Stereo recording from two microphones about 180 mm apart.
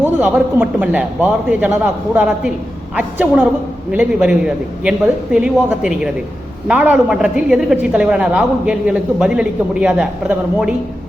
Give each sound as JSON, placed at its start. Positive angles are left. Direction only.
{"t": 0.0, "sound": "a man's voice", "side_deg": -10}